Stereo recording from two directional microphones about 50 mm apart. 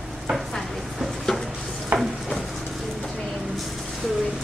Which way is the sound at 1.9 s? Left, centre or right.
Right.